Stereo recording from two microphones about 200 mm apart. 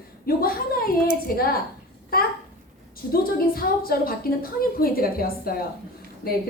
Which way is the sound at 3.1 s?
45° left (ahead or behind).